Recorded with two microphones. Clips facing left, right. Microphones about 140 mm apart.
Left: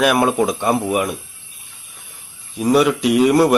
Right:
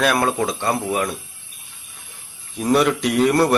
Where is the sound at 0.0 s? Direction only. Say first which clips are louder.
Left 4 dB; 15° left (ahead or behind).